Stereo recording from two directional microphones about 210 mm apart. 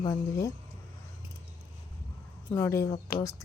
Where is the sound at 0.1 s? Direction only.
15° left (ahead or behind).